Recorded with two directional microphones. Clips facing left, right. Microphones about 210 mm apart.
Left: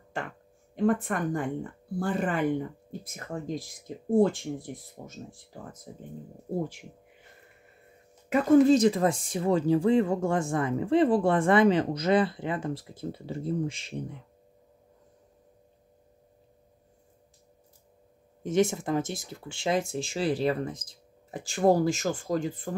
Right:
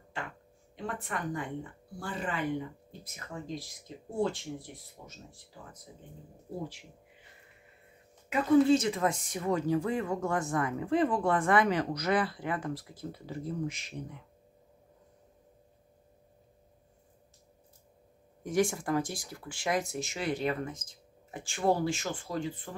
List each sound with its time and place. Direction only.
0.7 s speech: 50° left (ahead or behind)
8.3 s speech: 45° left (ahead or behind); by 13.9 s 30° left (ahead or behind)
18.4 s speech: 25° left (ahead or behind); by 22.7 s 45° left (ahead or behind)